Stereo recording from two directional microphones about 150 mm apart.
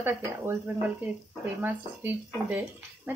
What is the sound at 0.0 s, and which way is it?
Speech, 15° right (ahead or behind).